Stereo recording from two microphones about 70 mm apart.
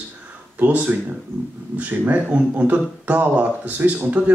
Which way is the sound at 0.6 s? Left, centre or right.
Right.